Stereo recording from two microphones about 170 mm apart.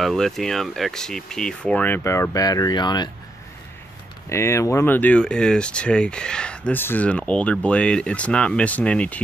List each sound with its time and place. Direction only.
0.0 s speech: centre (ahead or behind); by 3.1 s 25° left (ahead or behind)
4.3 s speech: 15° left (ahead or behind)